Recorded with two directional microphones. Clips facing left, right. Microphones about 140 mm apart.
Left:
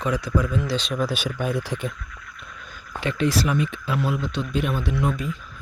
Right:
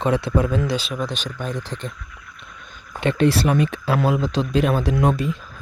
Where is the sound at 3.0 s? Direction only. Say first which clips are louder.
Right 5 dB; 60° right (ahead or behind).